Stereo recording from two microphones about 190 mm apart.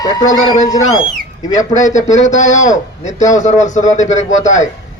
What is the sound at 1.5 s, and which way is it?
A man's voice, 40° left (ahead or behind).